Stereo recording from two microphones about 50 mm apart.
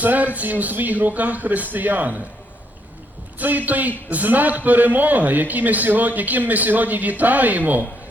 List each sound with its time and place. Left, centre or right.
0.0 s a man's voice: right
3.3 s a man's voice: right